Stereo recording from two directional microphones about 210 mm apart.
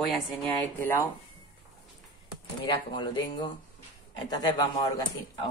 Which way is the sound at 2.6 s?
20° left (ahead or behind).